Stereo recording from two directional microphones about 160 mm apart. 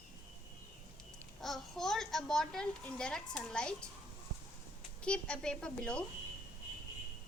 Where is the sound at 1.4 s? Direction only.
Centre (ahead or behind).